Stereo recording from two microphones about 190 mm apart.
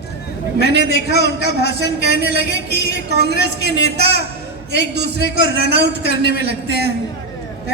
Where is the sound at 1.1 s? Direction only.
60° left (ahead or behind).